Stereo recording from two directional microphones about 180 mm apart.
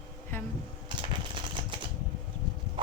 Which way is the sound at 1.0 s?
25° right (ahead or behind).